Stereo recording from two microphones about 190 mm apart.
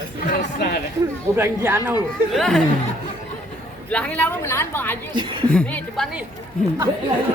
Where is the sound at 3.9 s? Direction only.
5° left (ahead or behind).